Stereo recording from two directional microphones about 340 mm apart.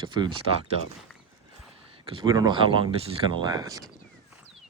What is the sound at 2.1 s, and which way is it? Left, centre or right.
Speech, centre.